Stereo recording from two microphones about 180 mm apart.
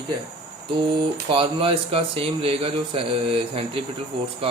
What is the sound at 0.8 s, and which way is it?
Speech, 30° right (ahead or behind).